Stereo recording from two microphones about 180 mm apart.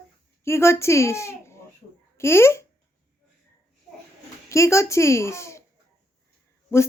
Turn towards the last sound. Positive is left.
turn(degrees=15)  # may be behind; listen again after turning